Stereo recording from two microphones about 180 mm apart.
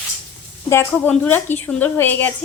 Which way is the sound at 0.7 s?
10° left (ahead or behind).